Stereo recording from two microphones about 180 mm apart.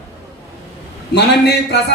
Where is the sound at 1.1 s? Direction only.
70° left (ahead or behind).